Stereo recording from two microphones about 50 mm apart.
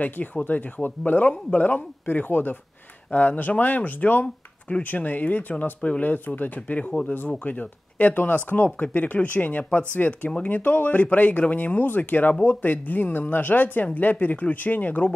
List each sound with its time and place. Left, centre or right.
0.0 s speech: left
8.6 s speech: left